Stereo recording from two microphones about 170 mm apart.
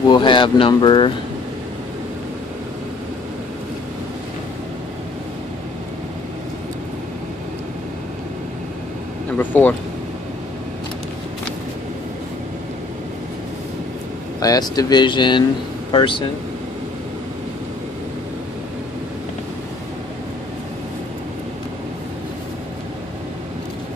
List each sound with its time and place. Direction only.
0.1 s speech: 25° left (ahead or behind)
9.4 s speech: 10° left (ahead or behind)
14.4 s speech: 20° left (ahead or behind)